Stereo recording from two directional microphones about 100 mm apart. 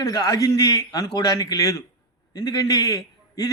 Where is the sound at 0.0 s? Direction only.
35° left (ahead or behind).